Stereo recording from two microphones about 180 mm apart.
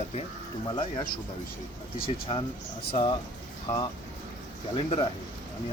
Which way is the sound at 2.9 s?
30° left (ahead or behind).